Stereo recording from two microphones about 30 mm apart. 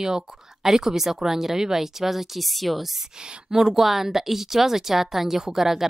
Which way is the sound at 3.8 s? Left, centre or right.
Centre.